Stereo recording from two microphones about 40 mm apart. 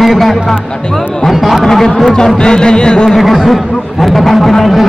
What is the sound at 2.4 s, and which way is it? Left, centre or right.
Music, left.